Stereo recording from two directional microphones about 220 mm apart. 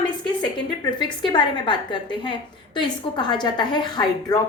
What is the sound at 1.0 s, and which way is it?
A woman's voice, 20° left (ahead or behind).